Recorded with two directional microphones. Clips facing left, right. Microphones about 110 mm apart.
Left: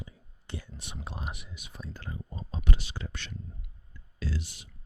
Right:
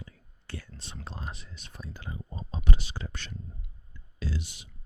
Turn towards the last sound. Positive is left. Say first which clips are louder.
# even
turn(degrees=-20)  # may be behind; listen again after turning